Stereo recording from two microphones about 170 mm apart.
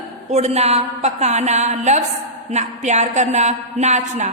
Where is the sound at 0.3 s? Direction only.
40° right (ahead or behind).